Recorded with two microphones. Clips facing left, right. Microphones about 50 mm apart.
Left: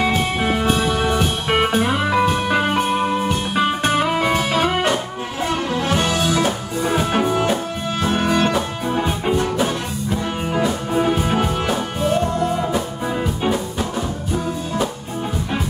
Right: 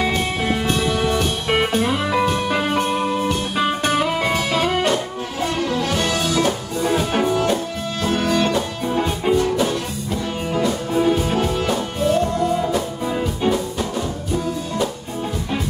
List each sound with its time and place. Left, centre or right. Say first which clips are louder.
0.0 s music: left 2 dB; centre